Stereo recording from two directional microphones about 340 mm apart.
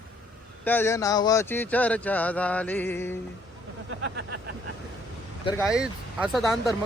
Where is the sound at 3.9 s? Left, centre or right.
Right.